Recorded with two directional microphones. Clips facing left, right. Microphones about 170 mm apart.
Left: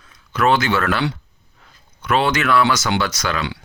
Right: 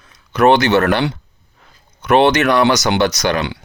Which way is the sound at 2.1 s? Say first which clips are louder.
Right 6 dB; 65° right (ahead or behind).